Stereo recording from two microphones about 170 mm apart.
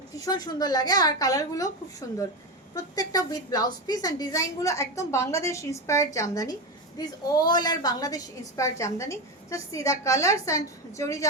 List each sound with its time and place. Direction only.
0.1 s a woman's voice: 20° left (ahead or behind)